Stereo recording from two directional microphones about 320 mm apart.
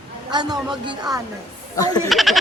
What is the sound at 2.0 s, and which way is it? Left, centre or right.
Speech, centre.